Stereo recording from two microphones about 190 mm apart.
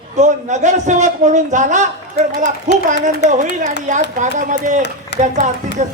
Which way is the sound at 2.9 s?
40° right (ahead or behind).